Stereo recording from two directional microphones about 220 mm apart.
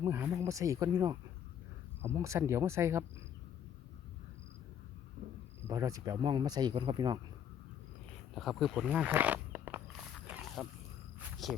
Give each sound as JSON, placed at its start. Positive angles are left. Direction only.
{"t": 0.0, "sound": "speech", "side_deg": -10}
{"t": 5.6, "sound": "speech", "side_deg": -15}
{"t": 8.4, "sound": "wild animals", "side_deg": 0}
{"t": 11.2, "sound": "cricket", "side_deg": 0}